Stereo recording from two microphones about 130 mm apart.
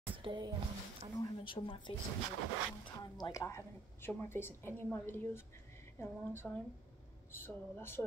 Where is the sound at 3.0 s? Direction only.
30° left (ahead or behind).